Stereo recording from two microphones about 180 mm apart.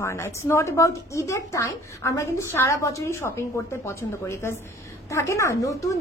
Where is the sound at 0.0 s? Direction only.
15° left (ahead or behind).